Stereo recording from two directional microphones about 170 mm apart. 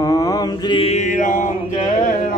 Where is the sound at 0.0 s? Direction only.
20° left (ahead or behind).